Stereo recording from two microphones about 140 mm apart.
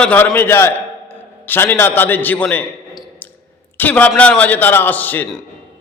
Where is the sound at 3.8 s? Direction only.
10° left (ahead or behind).